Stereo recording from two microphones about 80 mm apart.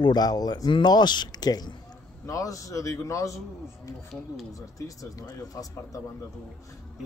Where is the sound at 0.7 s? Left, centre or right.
Left.